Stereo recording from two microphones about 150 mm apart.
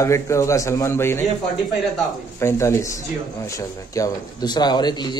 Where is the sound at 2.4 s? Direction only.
20° left (ahead or behind).